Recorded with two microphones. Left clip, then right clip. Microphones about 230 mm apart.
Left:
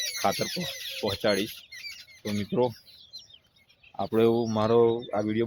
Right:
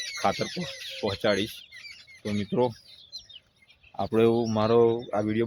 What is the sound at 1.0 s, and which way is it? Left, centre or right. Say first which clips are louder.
Speech: right 1 dB; centre.